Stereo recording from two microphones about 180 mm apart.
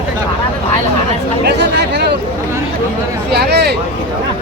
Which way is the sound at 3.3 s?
65° right (ahead or behind).